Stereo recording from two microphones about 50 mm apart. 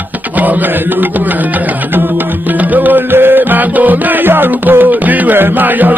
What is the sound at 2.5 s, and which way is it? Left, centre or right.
Music, right.